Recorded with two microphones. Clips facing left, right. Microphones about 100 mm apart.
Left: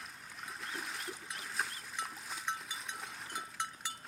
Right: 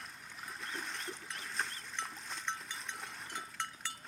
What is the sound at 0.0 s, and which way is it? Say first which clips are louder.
Splash: even; centre (ahead or behind).